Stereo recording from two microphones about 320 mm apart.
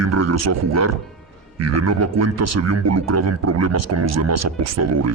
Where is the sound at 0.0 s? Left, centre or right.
Right.